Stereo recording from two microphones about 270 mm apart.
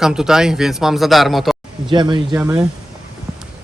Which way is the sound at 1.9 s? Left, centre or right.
Centre.